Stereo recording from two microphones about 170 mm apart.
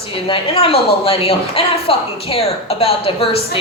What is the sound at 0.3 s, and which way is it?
Speech, 35° left (ahead or behind).